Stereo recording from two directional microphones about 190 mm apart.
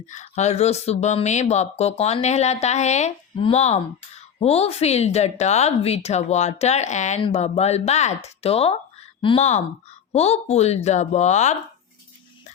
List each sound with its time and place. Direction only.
0.1 s speech: 40° left (ahead or behind)